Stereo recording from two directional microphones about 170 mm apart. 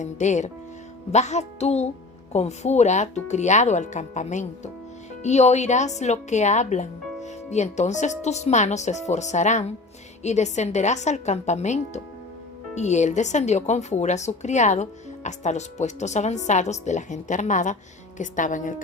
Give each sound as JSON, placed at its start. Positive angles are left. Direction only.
{"t": 0.0, "sound": "speech", "side_deg": 45}